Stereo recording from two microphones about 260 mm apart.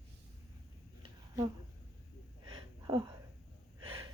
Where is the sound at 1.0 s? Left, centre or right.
Centre.